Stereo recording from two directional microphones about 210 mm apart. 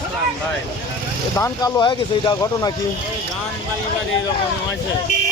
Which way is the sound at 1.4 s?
20° left (ahead or behind).